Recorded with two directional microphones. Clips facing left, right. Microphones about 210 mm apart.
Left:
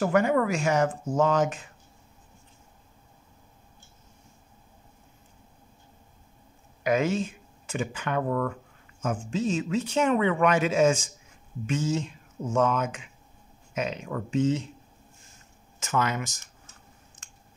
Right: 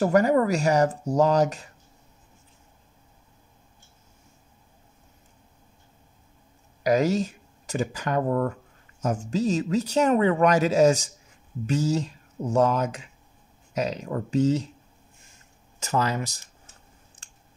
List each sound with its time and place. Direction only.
0.0 s speech: 40° right (ahead or behind)
6.8 s speech: 35° right (ahead or behind)
15.8 s speech: 35° right (ahead or behind)